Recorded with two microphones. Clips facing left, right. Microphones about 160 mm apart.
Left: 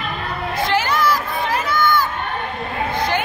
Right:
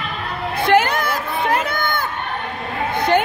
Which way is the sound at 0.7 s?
55° right (ahead or behind).